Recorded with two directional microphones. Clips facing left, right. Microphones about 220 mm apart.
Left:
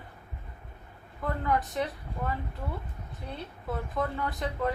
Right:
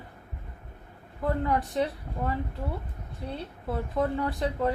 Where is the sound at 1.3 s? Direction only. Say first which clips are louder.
Right 2 dB; 30° right (ahead or behind).